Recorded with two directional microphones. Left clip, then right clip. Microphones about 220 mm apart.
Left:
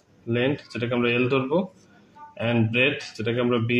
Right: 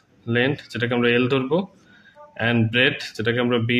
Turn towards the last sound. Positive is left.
turn(degrees=-40)  # may be behind; listen again after turning